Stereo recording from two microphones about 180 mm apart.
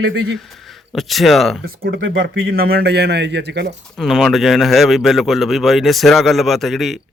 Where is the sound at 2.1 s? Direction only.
80° right.